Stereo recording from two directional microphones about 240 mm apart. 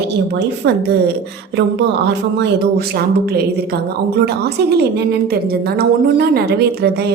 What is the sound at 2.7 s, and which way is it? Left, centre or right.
A woman's voice, right.